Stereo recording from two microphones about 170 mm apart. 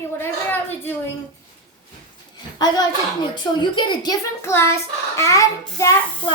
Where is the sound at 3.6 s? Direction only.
25° left (ahead or behind).